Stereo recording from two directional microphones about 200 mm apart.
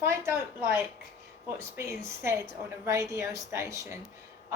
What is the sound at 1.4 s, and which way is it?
A woman's voice, 10° right (ahead or behind).